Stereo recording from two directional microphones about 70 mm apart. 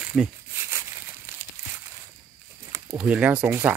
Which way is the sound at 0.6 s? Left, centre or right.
Right.